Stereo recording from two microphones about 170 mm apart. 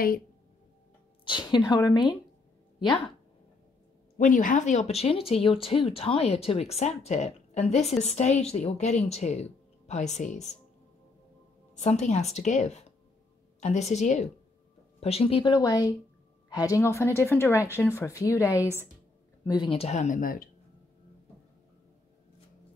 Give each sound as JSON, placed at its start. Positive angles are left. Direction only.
{"t": 1.2, "sound": "a woman's voice", "side_deg": 30}
{"t": 4.2, "sound": "speech", "side_deg": 50}
{"t": 11.7, "sound": "a woman's voice", "side_deg": 40}